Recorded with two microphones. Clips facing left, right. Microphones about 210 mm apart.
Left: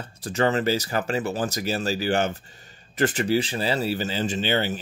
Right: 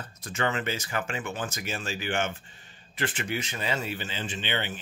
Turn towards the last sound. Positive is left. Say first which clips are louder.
# left 8 dB
turn(degrees=40)  # may be behind; listen again after turning